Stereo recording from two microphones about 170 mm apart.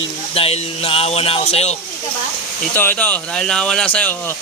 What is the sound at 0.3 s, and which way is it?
Speech, 35° left (ahead or behind).